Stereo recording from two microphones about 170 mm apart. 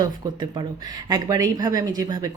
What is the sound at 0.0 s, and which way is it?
Speech, 25° right (ahead or behind).